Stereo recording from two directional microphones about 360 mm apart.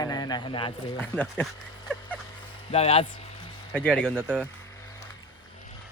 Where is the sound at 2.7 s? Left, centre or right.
Centre.